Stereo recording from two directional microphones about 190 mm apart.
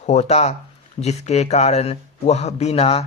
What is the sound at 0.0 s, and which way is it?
A man's voice, 35° left (ahead or behind).